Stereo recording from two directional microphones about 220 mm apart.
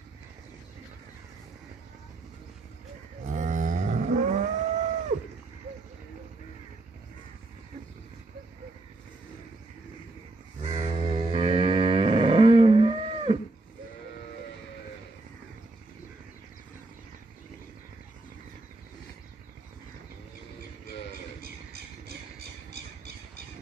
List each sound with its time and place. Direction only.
3.3 s cattle: 35° right (ahead or behind)
10.6 s cattle: 30° right (ahead or behind)